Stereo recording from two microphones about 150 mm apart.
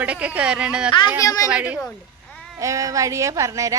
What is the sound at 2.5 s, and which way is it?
A woman's voice, 20° right (ahead or behind).